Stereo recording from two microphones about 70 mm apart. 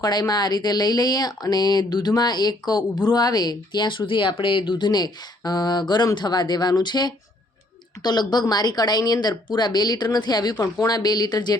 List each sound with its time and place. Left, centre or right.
0.0 s speech: left
10.6 s speech: left
10.9 s speech: left